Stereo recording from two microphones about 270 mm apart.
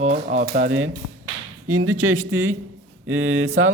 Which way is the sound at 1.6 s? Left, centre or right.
Right.